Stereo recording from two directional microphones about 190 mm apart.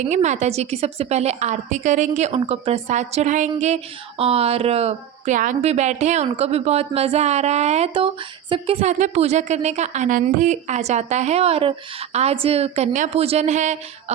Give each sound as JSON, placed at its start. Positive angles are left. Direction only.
{"t": 0.0, "sound": "a woman's voice", "side_deg": -40}